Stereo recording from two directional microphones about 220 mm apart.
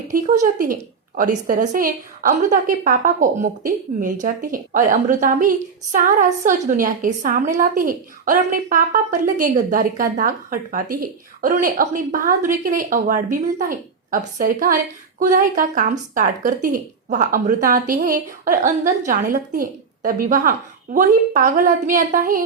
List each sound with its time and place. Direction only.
0.6 s speech: 40° right (ahead or behind)